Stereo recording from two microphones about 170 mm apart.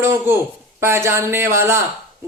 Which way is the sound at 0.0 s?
15° right (ahead or behind).